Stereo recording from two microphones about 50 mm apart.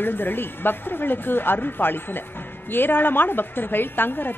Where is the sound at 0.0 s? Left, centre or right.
Left.